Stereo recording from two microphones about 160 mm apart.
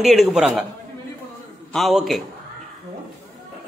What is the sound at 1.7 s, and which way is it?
Speech, centre (ahead or behind).